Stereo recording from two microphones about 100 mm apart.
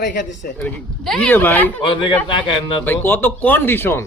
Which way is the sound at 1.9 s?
55° left (ahead or behind).